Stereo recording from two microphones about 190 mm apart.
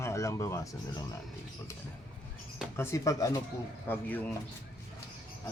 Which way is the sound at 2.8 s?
15° left (ahead or behind).